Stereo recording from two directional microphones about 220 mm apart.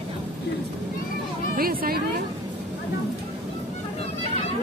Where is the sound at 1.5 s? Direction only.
40° right (ahead or behind).